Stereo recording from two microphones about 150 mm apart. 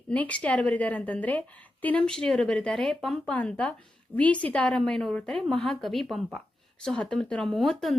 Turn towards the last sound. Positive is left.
turn(degrees=0)  # may be behind; listen again after turning